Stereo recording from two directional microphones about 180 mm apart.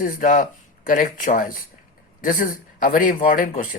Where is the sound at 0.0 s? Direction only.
50° left (ahead or behind).